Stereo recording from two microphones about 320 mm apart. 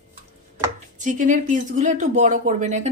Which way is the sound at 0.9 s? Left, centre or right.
Right.